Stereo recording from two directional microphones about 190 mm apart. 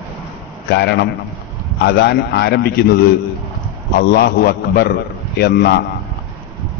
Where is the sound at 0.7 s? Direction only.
60° left (ahead or behind).